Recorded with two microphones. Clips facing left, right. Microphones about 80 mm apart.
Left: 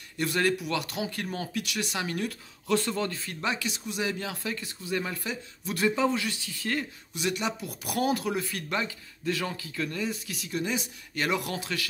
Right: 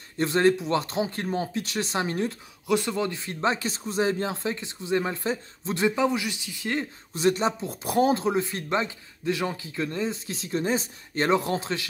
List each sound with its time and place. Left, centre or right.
0.2 s speech: right
2.6 s speech: centre
7.2 s speech: right